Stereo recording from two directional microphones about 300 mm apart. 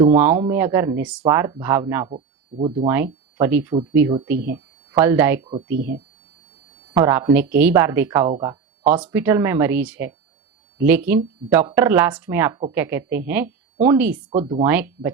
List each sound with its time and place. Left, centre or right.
0.1 s speech: centre
2.8 s speech: centre
6.9 s speech: centre
14.3 s speech: centre
14.6 s speech: centre